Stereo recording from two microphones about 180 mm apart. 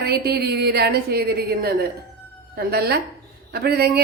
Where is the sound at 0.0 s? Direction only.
60° right (ahead or behind).